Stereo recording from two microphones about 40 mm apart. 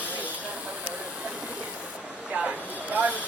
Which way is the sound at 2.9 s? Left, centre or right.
Right.